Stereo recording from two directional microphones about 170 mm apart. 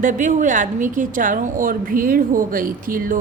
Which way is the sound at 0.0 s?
50° right (ahead or behind).